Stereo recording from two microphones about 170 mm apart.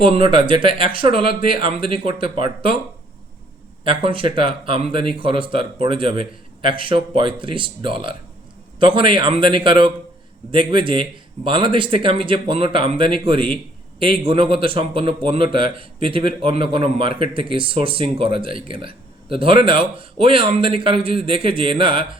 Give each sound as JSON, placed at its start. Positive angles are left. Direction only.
{"t": 0.0, "sound": "speech", "side_deg": -30}
{"t": 3.8, "sound": "a man's voice", "side_deg": -30}